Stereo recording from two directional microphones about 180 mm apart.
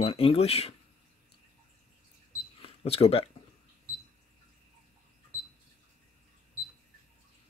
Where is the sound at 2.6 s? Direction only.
35° left (ahead or behind).